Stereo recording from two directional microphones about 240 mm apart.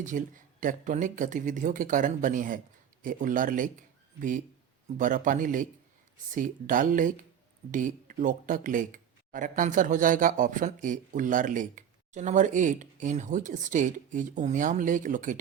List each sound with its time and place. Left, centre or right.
0.1 s speech: right